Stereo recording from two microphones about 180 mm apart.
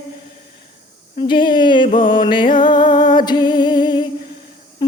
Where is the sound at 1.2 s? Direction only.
25° left (ahead or behind).